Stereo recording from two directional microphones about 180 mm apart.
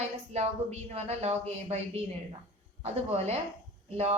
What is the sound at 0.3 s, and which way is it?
Speech, 35° right (ahead or behind).